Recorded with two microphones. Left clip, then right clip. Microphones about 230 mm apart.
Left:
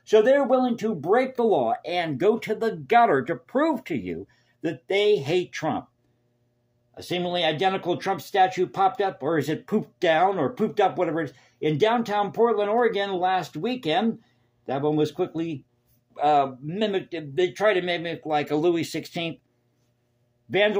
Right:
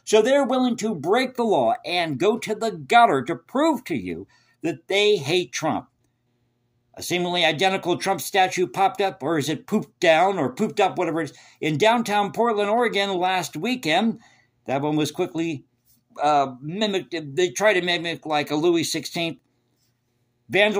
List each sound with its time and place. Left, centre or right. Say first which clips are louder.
0.0 s speech: right 1 dB; right
6.9 s speech: right 3 dB; right
20.4 s a man's voice: right 2 dB; centre